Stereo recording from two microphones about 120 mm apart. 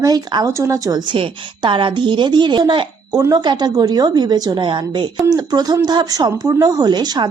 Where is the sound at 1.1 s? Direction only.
45° right (ahead or behind).